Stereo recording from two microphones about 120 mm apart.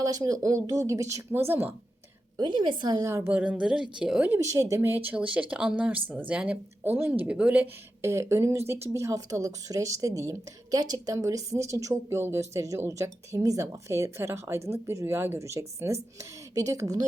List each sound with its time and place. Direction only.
0.0 s speech: 30° right (ahead or behind)
2.4 s a woman's voice: 40° right (ahead or behind)
3.1 s speech: 20° right (ahead or behind)
3.3 s speech: 10° right (ahead or behind)
4.4 s speech: 25° right (ahead or behind); by 7.7 s 10° right (ahead or behind)
8.0 s speech: 25° right (ahead or behind)